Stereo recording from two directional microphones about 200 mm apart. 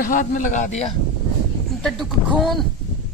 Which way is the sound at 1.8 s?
Centre (ahead or behind).